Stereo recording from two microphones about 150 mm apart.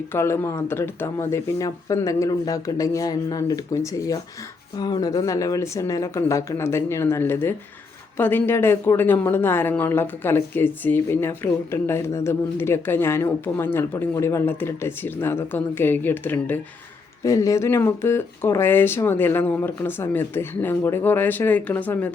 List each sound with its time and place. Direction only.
0.1 s speech: 15° left (ahead or behind)